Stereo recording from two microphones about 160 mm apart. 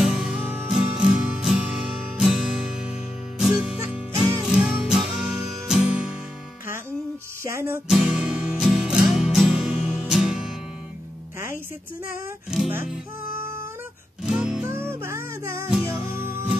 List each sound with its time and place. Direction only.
0.0 s music: centre (ahead or behind)
7.4 s music: 15° right (ahead or behind)
12.4 s music: 5° right (ahead or behind)
13.3 s music: 15° right (ahead or behind)